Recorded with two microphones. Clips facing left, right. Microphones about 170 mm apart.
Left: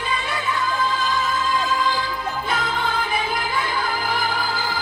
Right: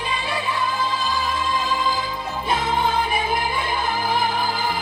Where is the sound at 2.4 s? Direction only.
25° right (ahead or behind).